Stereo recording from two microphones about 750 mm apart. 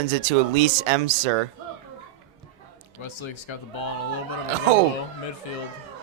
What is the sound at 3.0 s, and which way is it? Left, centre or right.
Speech, left.